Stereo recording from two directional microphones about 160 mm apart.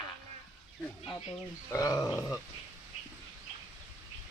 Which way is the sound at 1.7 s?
20° left (ahead or behind).